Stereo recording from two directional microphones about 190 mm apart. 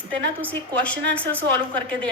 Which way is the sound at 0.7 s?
5° left (ahead or behind).